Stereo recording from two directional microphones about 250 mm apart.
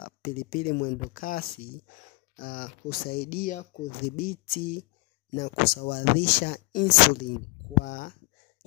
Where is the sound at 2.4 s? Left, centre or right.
Left.